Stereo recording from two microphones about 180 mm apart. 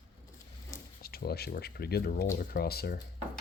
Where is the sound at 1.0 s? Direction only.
60° left (ahead or behind).